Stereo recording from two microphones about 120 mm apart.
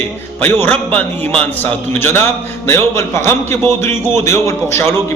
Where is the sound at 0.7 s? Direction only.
10° left (ahead or behind).